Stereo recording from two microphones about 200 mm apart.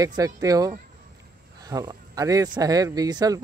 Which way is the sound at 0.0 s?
15° right (ahead or behind).